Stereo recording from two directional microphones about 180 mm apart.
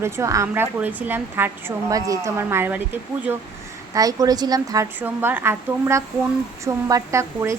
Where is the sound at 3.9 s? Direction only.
20° right (ahead or behind).